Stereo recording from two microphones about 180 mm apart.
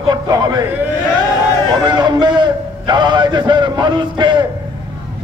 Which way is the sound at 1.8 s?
25° right (ahead or behind).